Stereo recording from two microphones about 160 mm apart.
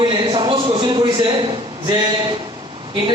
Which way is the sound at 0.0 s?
30° right (ahead or behind).